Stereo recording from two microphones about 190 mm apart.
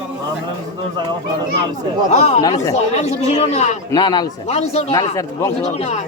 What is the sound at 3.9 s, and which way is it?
Speech, 20° left (ahead or behind).